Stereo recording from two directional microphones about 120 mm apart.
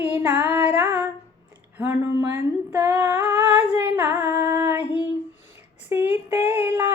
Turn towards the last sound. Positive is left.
turn(degrees=-15)  # may be behind; listen again after turning